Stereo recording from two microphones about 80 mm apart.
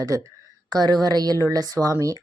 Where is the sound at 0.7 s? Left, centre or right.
Right.